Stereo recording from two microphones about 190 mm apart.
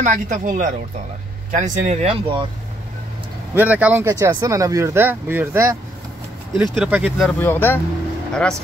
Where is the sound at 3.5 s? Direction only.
10° right (ahead or behind).